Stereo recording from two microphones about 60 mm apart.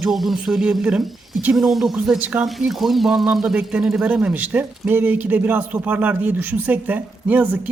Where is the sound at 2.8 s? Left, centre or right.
Centre.